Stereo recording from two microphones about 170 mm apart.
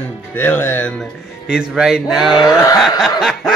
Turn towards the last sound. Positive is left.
turn(degrees=0)  # may be behind; listen again after turning